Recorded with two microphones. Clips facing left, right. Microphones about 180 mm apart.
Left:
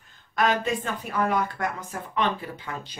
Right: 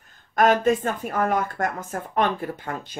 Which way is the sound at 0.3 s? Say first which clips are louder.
Right 6 dB; 45° right (ahead or behind).